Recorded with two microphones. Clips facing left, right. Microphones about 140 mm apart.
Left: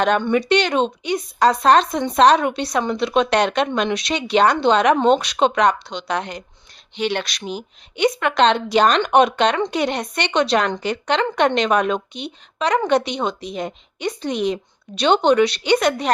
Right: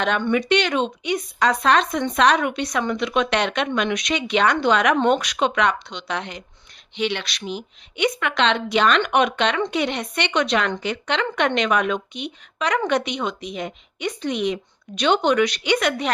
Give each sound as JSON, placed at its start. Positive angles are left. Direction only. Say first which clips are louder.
{"t": 0.3, "sound": "a woman's voice", "louder": "left 2 dB", "side_deg": 35}